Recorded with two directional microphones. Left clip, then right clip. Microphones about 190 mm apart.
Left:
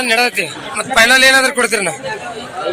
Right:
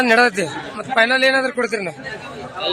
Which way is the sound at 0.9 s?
Centre (ahead or behind).